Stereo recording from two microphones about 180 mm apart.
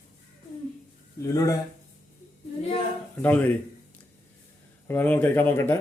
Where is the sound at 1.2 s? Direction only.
20° left (ahead or behind).